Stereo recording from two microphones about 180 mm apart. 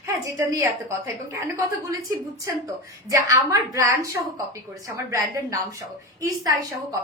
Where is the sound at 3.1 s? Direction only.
15° right (ahead or behind).